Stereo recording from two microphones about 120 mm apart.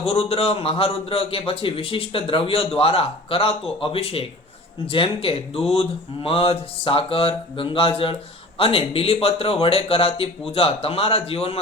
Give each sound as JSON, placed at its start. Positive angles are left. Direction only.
{"t": 0.0, "sound": "a man's voice", "side_deg": 55}